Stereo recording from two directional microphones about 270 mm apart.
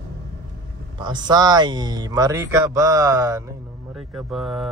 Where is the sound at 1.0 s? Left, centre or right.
Centre.